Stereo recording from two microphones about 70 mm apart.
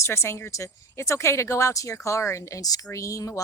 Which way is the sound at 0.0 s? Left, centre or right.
Left.